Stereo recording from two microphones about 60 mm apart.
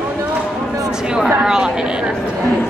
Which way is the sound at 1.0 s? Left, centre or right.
Centre.